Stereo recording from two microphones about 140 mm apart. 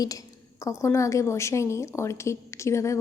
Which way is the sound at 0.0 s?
25° left (ahead or behind).